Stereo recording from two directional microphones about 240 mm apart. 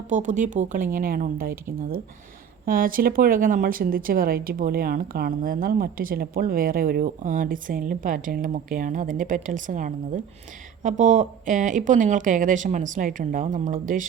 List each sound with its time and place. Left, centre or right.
0.1 s speech: right